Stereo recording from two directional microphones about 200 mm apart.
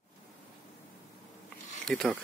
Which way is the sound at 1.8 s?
5° left (ahead or behind).